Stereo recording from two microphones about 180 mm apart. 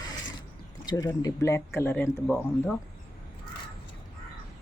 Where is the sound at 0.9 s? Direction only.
20° left (ahead or behind).